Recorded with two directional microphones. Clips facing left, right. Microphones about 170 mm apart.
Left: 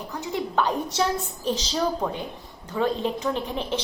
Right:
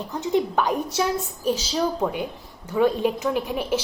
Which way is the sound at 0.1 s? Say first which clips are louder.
Right 6 dB; 20° right (ahead or behind).